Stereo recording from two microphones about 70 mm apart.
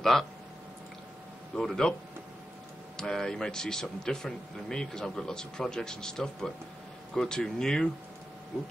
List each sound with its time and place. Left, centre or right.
0.0 s speech: centre
1.6 s speech: centre
3.0 s speech: centre